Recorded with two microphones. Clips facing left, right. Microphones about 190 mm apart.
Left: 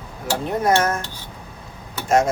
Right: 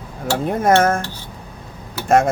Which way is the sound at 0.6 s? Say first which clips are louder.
Right 4 dB; 55° right (ahead or behind).